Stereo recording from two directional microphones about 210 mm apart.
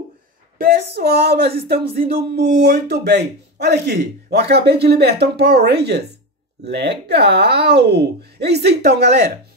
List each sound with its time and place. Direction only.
0.6 s a man's voice: 45° right (ahead or behind)